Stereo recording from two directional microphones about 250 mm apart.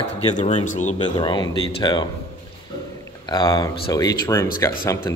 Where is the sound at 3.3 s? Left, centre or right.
Centre.